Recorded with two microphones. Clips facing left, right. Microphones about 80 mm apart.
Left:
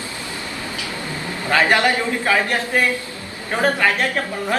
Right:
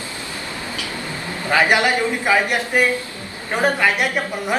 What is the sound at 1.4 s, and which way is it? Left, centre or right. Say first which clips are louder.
A woman's voice: even; centre.